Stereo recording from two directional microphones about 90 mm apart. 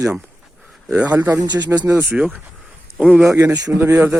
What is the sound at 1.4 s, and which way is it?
Speech, 50° right (ahead or behind).